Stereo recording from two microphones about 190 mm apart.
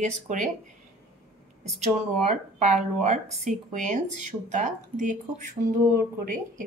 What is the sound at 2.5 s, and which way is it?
Speech, 35° right (ahead or behind).